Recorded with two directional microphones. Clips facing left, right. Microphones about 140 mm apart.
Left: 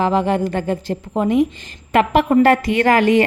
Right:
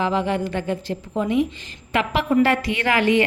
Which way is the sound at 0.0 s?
45° left (ahead or behind).